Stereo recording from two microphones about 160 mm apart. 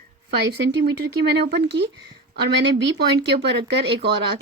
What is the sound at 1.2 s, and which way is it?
Speech, 90° right.